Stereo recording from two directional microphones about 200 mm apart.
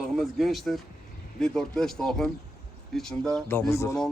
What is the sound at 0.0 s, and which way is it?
Speech, centre (ahead or behind).